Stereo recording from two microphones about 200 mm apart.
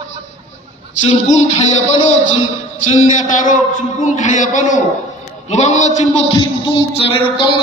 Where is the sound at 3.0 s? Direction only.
40° left (ahead or behind).